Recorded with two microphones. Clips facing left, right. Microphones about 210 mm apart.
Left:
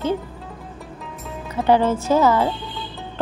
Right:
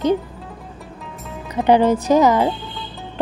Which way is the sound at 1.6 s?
15° right (ahead or behind).